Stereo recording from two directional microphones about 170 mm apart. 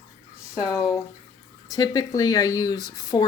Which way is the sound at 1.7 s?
20° left (ahead or behind).